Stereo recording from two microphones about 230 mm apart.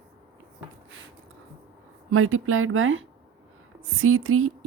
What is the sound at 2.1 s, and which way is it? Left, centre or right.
Speech, right.